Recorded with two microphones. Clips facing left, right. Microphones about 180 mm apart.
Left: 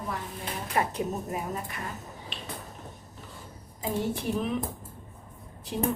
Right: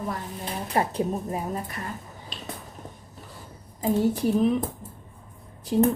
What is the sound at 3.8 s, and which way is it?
Speech, 40° right (ahead or behind).